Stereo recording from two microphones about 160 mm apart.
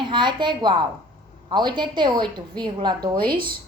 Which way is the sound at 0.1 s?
30° right (ahead or behind).